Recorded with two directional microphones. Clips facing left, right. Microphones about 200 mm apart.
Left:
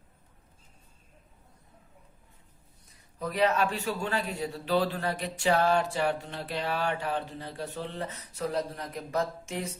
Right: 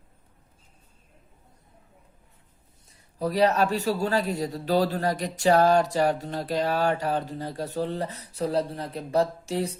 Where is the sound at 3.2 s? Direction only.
35° right (ahead or behind).